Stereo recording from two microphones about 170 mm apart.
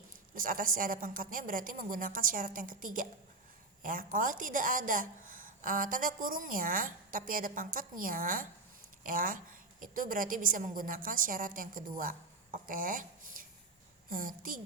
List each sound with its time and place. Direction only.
0.3 s a woman's voice: 55° right (ahead or behind)